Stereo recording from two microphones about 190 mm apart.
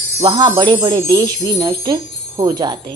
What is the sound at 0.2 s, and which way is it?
Speech, 25° right (ahead or behind).